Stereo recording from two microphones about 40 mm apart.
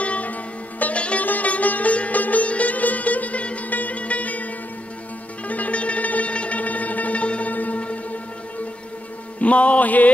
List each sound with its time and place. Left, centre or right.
0.0 s music: left
5.5 s music: left
9.4 s music: left